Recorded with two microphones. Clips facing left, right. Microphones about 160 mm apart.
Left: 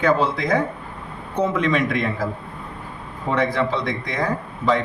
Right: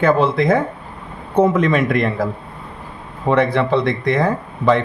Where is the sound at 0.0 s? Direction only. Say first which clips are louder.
Right 5 dB; 55° right (ahead or behind).